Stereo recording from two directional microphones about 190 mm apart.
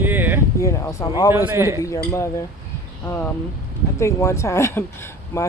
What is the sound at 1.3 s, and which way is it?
Speech, 10° right (ahead or behind).